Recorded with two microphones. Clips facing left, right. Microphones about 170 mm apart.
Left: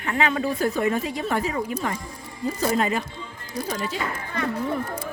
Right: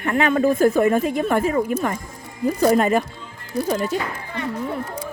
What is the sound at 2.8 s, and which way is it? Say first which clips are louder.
Speech: right 6 dB; 50° right (ahead or behind).